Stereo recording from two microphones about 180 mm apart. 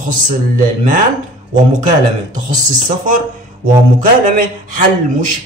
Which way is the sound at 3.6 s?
50° right (ahead or behind).